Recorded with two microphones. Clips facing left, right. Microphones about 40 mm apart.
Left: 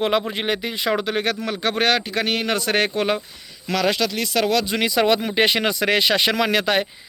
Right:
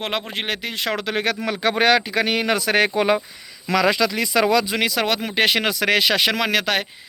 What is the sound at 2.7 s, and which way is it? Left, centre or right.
Speech, right.